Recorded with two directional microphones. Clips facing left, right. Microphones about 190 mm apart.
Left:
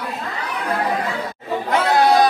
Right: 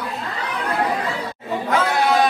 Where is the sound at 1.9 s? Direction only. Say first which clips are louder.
Left 6 dB; 35° left (ahead or behind).